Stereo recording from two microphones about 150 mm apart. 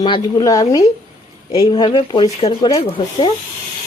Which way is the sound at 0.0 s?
30° left (ahead or behind).